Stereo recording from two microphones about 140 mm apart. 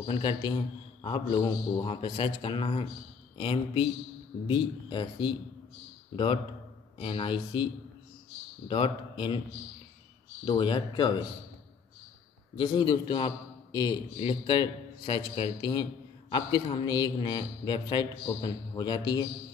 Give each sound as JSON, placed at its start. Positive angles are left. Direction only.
{"t": 0.0, "sound": "a man's voice", "side_deg": 35}
{"t": 10.4, "sound": "a man's voice", "side_deg": 35}
{"t": 12.5, "sound": "a man's voice", "side_deg": 35}